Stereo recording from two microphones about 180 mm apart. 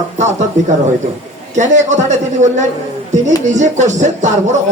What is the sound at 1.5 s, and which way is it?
A man's voice, 40° right (ahead or behind).